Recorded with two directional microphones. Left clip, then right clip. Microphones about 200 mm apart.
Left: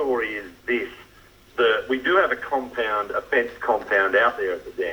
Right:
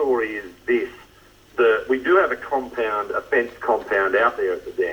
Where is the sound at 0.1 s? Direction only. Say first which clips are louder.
Right 2 dB; 35° right (ahead or behind).